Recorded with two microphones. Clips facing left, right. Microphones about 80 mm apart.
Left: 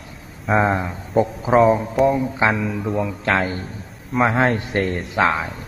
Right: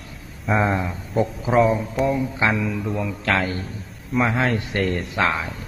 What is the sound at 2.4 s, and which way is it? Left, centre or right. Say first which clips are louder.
Speech: left 2 dB; centre.